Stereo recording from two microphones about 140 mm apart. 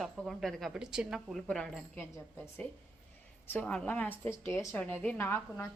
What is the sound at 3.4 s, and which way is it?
A woman's voice, 10° left (ahead or behind).